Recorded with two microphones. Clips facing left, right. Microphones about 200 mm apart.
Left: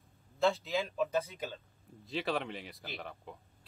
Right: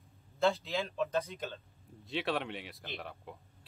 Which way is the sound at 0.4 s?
Centre (ahead or behind).